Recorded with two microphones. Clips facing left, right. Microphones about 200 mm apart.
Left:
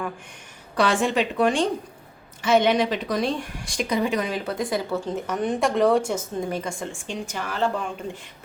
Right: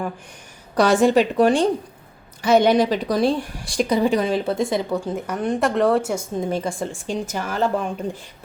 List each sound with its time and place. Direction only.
0.8 s a woman's voice: 40° right (ahead or behind); by 6.2 s 5° right (ahead or behind)
6.5 s a woman's voice: 35° right (ahead or behind)